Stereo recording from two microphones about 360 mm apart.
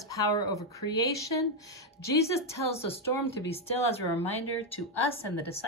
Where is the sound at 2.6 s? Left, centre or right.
Left.